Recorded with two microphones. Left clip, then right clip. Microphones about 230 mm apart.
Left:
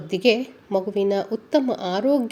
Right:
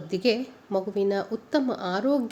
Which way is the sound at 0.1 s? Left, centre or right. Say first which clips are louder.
Left 5 dB; centre.